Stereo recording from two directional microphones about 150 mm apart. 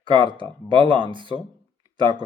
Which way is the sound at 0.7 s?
35° right (ahead or behind).